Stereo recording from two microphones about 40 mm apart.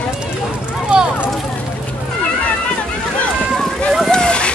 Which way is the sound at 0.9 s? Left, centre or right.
Right.